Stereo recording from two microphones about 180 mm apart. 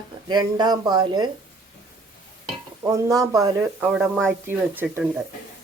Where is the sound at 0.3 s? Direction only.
25° right (ahead or behind).